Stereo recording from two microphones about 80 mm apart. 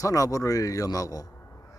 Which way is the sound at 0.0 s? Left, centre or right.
Left.